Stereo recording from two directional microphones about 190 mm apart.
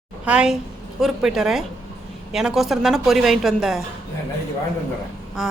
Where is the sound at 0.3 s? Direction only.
5° right (ahead or behind).